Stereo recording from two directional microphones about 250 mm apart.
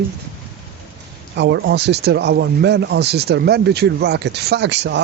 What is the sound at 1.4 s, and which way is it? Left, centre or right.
Speech, right.